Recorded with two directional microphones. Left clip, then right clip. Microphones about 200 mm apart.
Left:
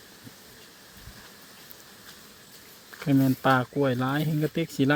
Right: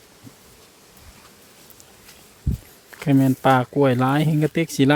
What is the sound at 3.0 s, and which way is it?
Speech, 15° right (ahead or behind).